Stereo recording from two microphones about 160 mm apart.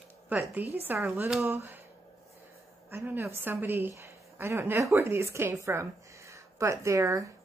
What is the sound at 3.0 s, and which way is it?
A woman's voice, 10° right (ahead or behind).